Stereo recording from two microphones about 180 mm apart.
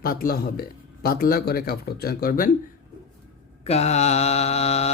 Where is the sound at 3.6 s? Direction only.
35° left (ahead or behind).